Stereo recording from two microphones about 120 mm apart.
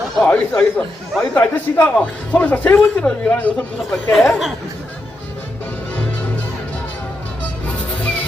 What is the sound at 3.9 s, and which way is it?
Speech, centre (ahead or behind).